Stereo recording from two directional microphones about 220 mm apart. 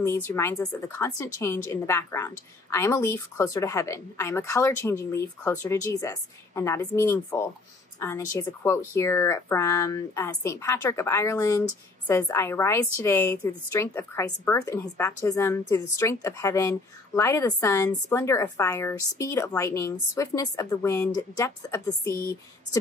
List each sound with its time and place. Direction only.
0.0 s a woman's voice: 10° left (ahead or behind)